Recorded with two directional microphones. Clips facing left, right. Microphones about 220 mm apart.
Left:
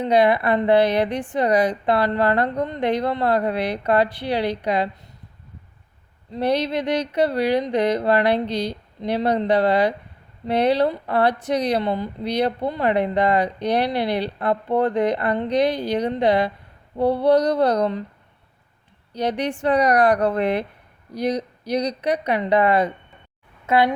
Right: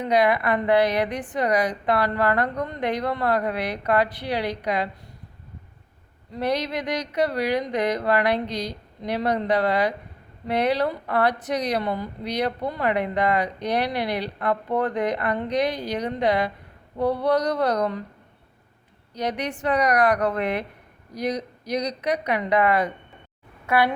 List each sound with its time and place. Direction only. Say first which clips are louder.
0.0 s speech: left 3 dB; 30° left (ahead or behind)
6.3 s speech: left 4 dB; 30° left (ahead or behind)
19.1 s a woman's voice: left 4 dB; 30° left (ahead or behind)